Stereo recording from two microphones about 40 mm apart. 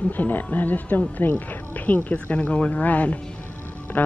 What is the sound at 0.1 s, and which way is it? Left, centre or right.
Speech, left.